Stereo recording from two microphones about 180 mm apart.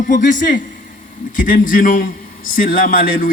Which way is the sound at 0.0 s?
45° left (ahead or behind).